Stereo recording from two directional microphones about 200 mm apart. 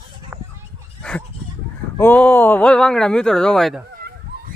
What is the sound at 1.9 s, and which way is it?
Speech, 10° left (ahead or behind).